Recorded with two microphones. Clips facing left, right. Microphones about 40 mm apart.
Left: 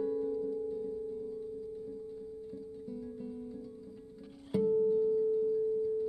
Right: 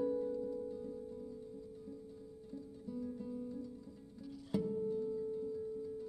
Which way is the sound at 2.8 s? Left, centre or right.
Centre.